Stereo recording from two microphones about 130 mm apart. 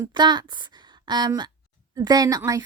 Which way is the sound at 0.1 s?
35° right (ahead or behind).